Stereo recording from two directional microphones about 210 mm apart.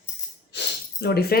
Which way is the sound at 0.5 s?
55° left (ahead or behind).